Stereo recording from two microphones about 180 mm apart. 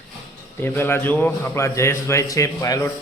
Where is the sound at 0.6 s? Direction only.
10° left (ahead or behind).